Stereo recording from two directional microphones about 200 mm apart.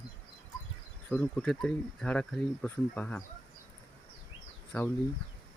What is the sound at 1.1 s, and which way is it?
Speech, 5° left (ahead or behind).